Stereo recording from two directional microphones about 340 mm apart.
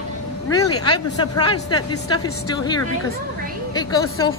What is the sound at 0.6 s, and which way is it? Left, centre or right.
Speech, centre.